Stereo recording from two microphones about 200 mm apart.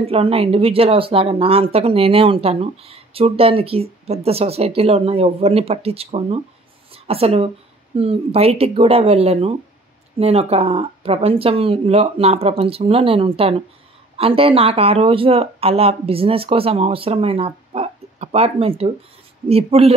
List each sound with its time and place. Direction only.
0.0 s speech: 30° right (ahead or behind)